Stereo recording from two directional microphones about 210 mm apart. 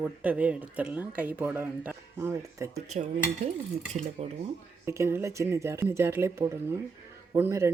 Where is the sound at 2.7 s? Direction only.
30° right (ahead or behind).